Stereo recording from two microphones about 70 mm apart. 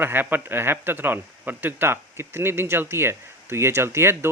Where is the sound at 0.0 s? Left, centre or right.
Right.